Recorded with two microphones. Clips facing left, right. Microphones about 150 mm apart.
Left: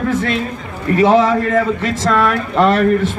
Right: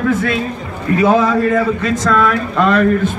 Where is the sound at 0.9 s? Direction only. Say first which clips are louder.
Left 1 dB; 25° left (ahead or behind).